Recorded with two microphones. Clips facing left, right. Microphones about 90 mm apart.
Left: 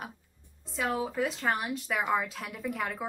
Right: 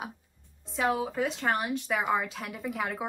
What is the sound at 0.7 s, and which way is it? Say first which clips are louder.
Speech: right 2 dB; centre (ahead or behind).